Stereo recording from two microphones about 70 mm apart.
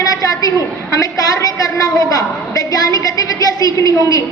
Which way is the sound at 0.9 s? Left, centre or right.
Left.